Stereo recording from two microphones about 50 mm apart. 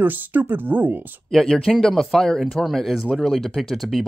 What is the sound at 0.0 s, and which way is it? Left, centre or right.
Speech, right.